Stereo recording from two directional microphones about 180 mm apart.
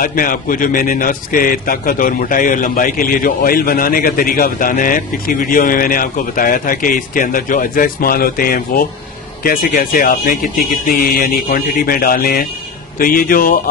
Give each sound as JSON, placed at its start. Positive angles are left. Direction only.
{"t": 0.0, "sound": "a man's voice", "side_deg": 50}